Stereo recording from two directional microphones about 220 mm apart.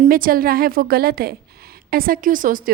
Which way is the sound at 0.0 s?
40° right (ahead or behind).